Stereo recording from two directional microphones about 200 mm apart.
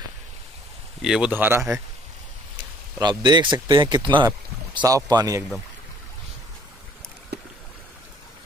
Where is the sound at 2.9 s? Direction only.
20° right (ahead or behind).